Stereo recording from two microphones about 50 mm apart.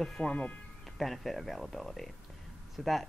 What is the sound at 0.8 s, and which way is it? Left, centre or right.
A woman's voice, centre.